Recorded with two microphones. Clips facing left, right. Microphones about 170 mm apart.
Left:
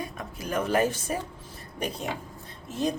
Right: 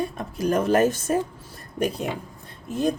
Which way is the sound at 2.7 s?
55° right (ahead or behind).